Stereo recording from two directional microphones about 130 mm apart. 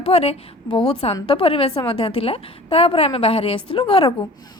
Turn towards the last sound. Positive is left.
turn(degrees=40)  # may be behind; listen again after turning